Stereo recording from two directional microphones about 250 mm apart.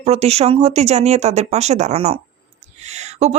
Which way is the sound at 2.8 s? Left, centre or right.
Right.